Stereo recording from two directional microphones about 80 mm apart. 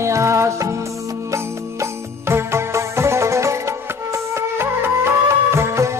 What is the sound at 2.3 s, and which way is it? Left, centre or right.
Music, right.